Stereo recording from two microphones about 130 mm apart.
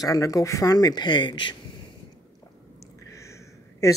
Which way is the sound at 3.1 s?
25° left (ahead or behind).